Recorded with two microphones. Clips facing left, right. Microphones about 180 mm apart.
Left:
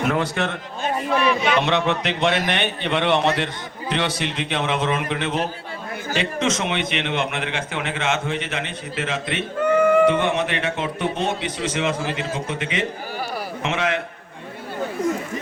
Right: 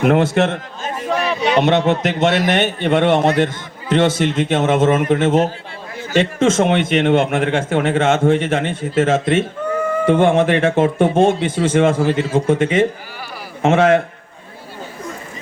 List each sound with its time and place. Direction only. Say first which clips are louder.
1.2 s a sound: right 6 dB; 35° right (ahead or behind)
1.9 s a man's voice: right 5 dB; 45° right (ahead or behind)
9.6 s bleat: left 4 dB; 75° left (ahead or behind)
10.1 s a man's voice: right 7 dB; 50° right (ahead or behind)